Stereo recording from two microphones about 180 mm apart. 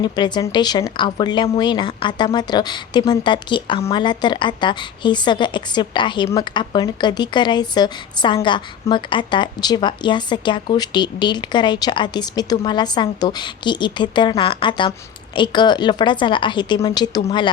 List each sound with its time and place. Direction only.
0.0 s speech: 25° left (ahead or behind)